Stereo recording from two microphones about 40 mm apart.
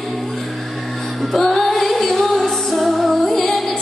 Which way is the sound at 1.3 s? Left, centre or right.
Centre.